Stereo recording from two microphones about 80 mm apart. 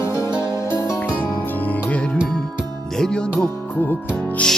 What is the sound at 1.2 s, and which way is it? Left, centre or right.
Music, left.